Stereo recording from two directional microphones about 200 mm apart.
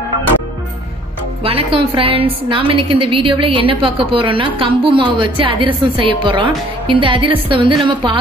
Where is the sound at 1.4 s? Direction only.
30° right (ahead or behind).